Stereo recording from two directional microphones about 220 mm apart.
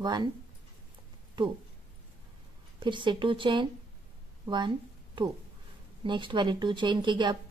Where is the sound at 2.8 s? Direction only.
20° right (ahead or behind).